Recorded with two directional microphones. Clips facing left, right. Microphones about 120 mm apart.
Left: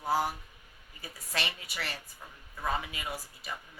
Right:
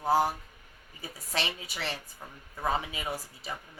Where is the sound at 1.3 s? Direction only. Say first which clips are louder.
Right 2 dB; 25° right (ahead or behind).